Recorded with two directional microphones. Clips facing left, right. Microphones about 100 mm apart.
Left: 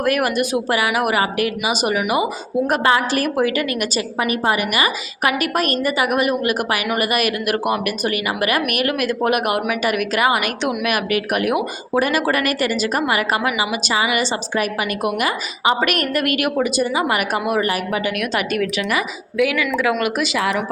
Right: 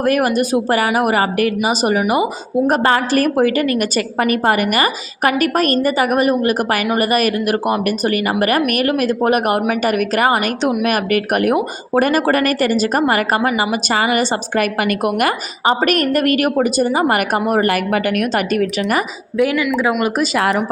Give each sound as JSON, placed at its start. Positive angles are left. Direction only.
{"t": 0.0, "sound": "a woman's voice", "side_deg": -35}
{"t": 15.6, "sound": "a woman's voice", "side_deg": -40}
{"t": 18.2, "sound": "a woman's voice", "side_deg": -40}